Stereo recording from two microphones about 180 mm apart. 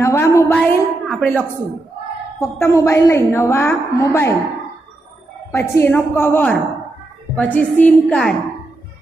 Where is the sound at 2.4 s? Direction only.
15° left (ahead or behind).